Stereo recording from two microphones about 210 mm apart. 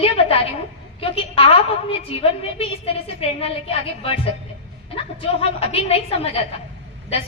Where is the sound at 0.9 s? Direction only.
25° left (ahead or behind).